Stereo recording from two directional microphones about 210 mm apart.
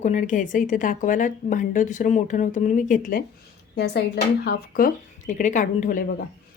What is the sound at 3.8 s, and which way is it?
Speech, 50° left (ahead or behind).